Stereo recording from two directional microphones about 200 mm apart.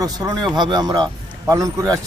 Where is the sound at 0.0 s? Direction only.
20° right (ahead or behind).